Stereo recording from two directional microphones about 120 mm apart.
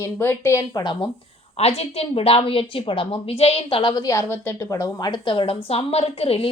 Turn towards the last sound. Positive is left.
turn(degrees=55)  # may be behind; listen again after turning